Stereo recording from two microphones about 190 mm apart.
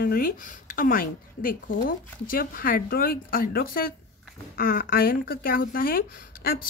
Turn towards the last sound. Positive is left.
turn(degrees=50)  # may be behind; listen again after turning